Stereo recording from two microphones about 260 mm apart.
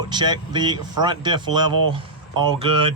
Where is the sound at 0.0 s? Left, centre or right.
Centre.